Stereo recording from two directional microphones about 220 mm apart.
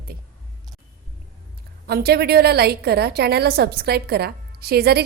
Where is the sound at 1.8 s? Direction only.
45° right (ahead or behind).